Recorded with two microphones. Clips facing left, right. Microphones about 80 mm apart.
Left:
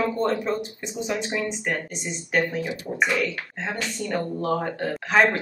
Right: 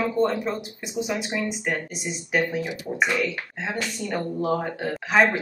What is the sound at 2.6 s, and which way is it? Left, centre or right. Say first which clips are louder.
Speech: left 1 dB; centre.